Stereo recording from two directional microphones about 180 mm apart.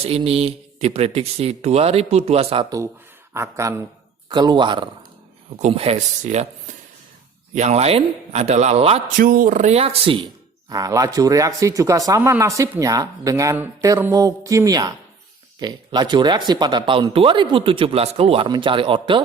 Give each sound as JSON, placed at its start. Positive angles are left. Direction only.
{"t": 0.1, "sound": "speech", "side_deg": -35}
{"t": 5.5, "sound": "speech", "side_deg": -35}
{"t": 7.5, "sound": "speech", "side_deg": -40}
{"t": 9.0, "sound": "speech", "side_deg": -45}
{"t": 10.7, "sound": "speech", "side_deg": -20}